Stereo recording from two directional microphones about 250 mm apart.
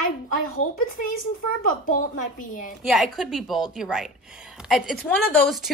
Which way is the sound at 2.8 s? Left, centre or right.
Centre.